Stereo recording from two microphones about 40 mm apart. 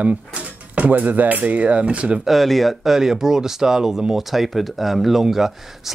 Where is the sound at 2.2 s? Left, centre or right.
Centre.